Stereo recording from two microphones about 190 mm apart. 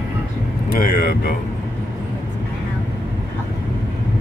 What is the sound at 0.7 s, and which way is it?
Vehicle, 55° left (ahead or behind).